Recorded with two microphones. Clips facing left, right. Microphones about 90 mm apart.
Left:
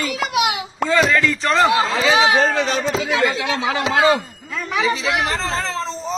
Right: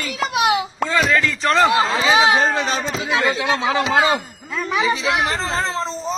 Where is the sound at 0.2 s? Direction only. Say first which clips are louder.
Right 3 dB; 35° right (ahead or behind).